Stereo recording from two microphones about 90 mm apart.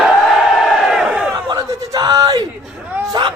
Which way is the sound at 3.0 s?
50° right (ahead or behind).